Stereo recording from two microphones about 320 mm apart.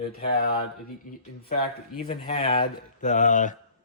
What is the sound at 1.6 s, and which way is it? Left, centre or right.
Speech, left.